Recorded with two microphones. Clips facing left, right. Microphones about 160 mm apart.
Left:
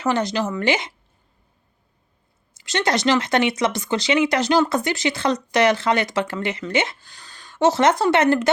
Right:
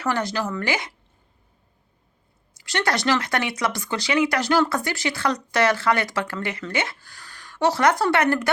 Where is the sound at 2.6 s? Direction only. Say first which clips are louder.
Left 3 dB; 20° left (ahead or behind).